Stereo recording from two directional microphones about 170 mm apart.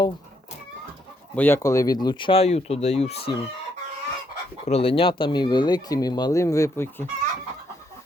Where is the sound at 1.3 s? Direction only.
10° left (ahead or behind); by 3.3 s 35° left (ahead or behind).